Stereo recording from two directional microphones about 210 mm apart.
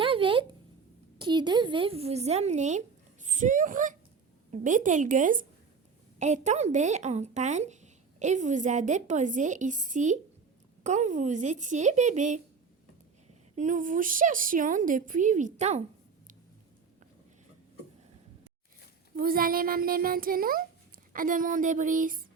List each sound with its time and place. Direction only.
0.0 s a sound: 25° right (ahead or behind)
1.2 s a woman's voice: 20° right (ahead or behind)
13.6 s a woman's voice: 40° right (ahead or behind)
19.1 s a child's voice: 45° right (ahead or behind)